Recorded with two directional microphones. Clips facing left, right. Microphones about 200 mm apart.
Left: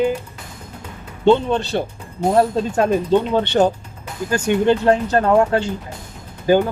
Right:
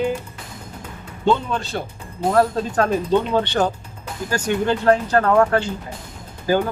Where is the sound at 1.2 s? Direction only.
30° left (ahead or behind).